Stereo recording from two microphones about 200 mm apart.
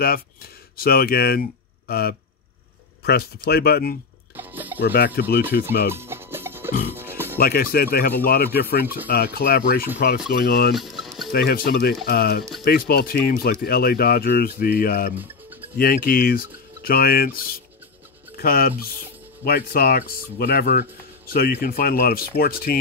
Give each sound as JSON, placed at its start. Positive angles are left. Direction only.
{"t": 0.0, "sound": "speech", "side_deg": 50}
{"t": 3.0, "sound": "a sound", "side_deg": 50}
{"t": 3.4, "sound": "speech", "side_deg": 50}
{"t": 4.4, "sound": "a sound", "side_deg": -10}
{"t": 4.9, "sound": "speech", "side_deg": 50}
{"t": 5.9, "sound": "music", "side_deg": -10}
{"t": 7.3, "sound": "speech", "side_deg": 50}
{"t": 10.7, "sound": "music", "side_deg": 0}
{"t": 11.3, "sound": "speech", "side_deg": 50}